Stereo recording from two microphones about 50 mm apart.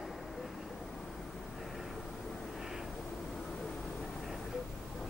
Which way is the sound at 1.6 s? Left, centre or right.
Centre.